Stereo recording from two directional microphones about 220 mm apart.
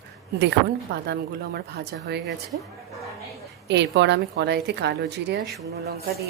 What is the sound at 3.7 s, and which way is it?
A woman's voice, 50° right (ahead or behind).